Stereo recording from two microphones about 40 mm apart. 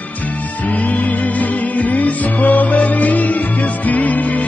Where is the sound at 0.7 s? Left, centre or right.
Left.